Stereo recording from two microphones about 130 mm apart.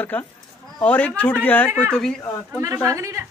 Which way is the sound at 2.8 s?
25° right (ahead or behind).